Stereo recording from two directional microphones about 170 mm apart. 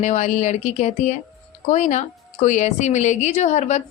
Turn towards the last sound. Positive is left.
turn(degrees=40)  # may be behind; listen again after turning